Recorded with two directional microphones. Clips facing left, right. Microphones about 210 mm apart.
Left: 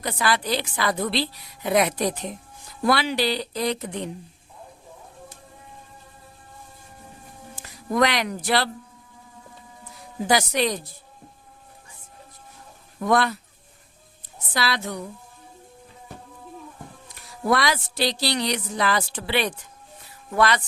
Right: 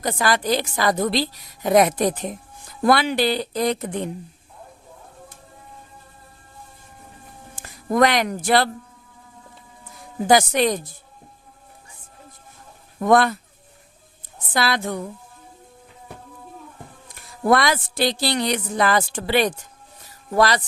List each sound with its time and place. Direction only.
0.0 s a woman's voice: 45° right (ahead or behind)
7.5 s speech: 50° right (ahead or behind)
10.2 s a woman's voice: 50° right (ahead or behind)
13.0 s a woman's voice: 50° right (ahead or behind)
14.5 s a woman's voice: 50° right (ahead or behind)
17.4 s a woman's voice: 50° right (ahead or behind)